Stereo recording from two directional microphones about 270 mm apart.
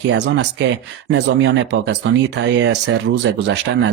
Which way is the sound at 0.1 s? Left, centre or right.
Right.